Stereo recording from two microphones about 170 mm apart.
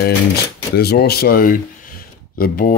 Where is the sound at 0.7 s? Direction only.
70° left (ahead or behind).